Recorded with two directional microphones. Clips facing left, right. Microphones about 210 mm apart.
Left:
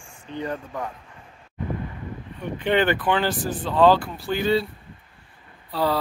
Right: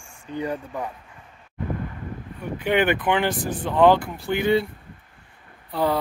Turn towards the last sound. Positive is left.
turn(degrees=-20)  # may be behind; listen again after turning